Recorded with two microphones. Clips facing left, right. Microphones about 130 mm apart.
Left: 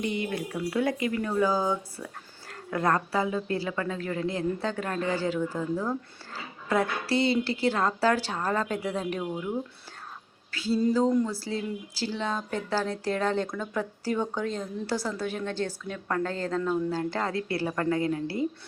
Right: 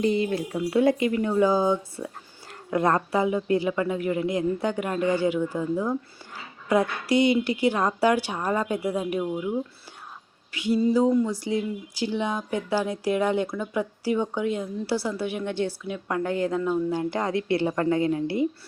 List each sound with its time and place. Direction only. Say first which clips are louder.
0.0 s speech: right 6 dB; 35° right (ahead or behind); by 9.6 s 5° right (ahead or behind)
10.5 s speech: right 3 dB; 15° right (ahead or behind)